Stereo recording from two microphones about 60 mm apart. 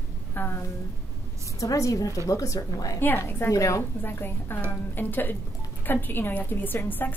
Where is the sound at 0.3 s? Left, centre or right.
Left.